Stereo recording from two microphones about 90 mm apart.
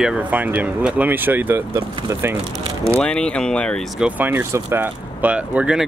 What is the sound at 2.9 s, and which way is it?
Speech, 10° left (ahead or behind).